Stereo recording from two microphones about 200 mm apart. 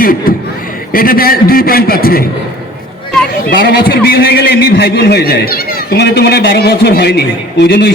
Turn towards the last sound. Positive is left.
turn(degrees=55)  # may be behind; listen again after turning